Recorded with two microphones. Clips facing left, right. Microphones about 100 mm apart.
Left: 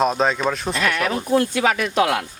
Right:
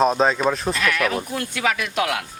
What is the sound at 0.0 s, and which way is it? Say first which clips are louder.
Speech: right 1 dB; centre (ahead or behind).